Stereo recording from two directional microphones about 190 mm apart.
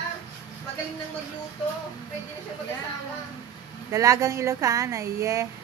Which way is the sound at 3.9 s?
15° right (ahead or behind).